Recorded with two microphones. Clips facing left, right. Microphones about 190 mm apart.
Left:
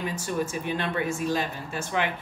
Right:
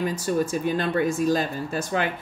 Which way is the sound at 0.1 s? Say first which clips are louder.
Right 5 dB; 40° right (ahead or behind).